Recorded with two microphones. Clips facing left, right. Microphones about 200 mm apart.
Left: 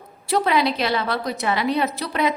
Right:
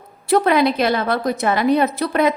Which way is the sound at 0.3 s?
50° right (ahead or behind).